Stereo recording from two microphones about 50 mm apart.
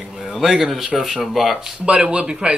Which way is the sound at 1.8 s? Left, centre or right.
Right.